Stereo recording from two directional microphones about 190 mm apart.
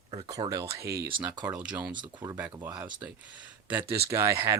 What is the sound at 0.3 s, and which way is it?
Speech, 20° right (ahead or behind).